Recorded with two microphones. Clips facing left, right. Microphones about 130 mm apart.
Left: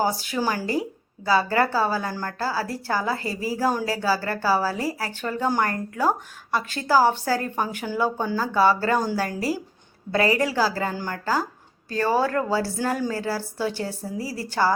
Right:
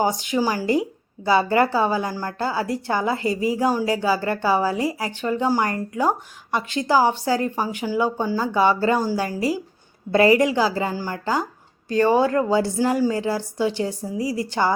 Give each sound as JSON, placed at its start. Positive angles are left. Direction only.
{"t": 0.0, "sound": "a woman's voice", "side_deg": -15}
{"t": 1.2, "sound": "a woman's voice", "side_deg": -25}
{"t": 10.1, "sound": "a woman's voice", "side_deg": -25}